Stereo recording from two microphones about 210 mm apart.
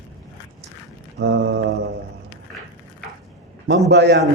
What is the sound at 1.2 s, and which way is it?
Speech, 55° right (ahead or behind).